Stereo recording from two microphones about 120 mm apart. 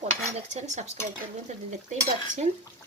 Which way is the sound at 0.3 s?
70° right (ahead or behind).